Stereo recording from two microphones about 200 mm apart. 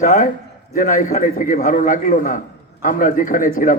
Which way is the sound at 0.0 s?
40° left (ahead or behind).